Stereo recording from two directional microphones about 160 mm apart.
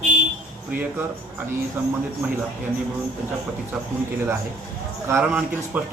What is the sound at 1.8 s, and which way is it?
Speech, 10° right (ahead or behind).